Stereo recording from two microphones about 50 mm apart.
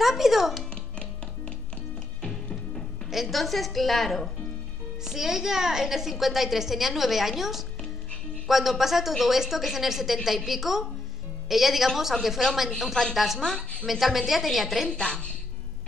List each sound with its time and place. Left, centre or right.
0.0 s music: centre
2.2 s music: centre
3.1 s a woman's voice: centre
5.0 s a woman's voice: centre
12.7 s speech: centre
13.1 s a woman's voice: centre
13.4 s speech: centre
13.8 s a woman's voice: centre
14.9 s a woman's voice: centre